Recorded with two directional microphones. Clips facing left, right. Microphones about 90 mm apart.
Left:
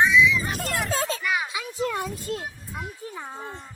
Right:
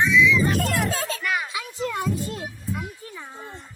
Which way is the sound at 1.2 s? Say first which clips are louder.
Even; 5° left (ahead or behind).